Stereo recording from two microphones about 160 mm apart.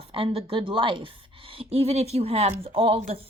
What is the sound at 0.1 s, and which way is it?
A woman's voice, 35° right (ahead or behind).